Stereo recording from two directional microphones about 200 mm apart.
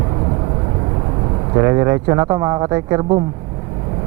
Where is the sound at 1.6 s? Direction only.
15° right (ahead or behind).